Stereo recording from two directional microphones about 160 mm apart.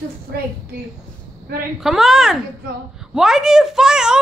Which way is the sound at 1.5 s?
70° right (ahead or behind).